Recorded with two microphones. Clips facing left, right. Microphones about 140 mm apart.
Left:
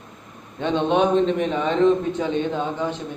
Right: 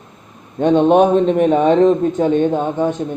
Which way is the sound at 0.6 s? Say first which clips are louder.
Right 8 dB; 45° right (ahead or behind).